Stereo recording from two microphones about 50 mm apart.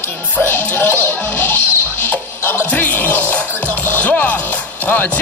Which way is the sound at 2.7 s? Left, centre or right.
Left.